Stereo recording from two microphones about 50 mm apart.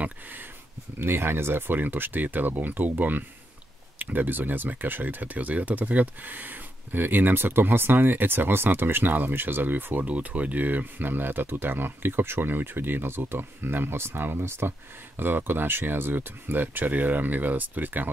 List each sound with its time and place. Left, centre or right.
0.0 s speech: right
0.9 s speech: right
10.0 s speech: right